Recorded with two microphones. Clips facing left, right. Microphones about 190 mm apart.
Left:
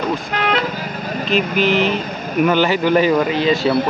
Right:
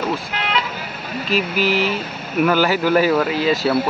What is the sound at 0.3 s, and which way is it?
Vehicle, 45° left (ahead or behind).